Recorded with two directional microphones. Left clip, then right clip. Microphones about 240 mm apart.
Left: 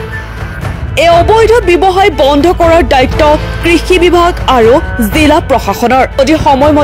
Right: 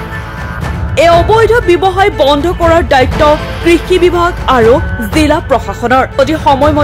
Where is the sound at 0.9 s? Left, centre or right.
Left.